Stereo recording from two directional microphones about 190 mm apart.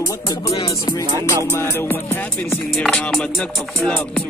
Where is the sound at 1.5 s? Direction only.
15° left (ahead or behind).